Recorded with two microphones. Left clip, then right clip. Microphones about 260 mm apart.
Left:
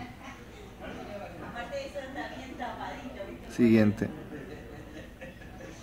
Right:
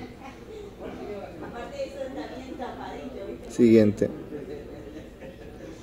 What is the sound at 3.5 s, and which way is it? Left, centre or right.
Speech, centre.